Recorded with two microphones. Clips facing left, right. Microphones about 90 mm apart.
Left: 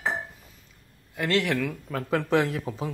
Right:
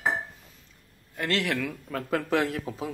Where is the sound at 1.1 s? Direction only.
Centre (ahead or behind).